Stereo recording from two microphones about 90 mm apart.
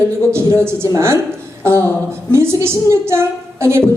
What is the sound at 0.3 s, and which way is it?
Speech, 30° right (ahead or behind).